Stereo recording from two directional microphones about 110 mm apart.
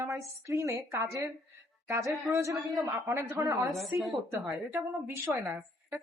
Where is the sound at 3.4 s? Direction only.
25° right (ahead or behind).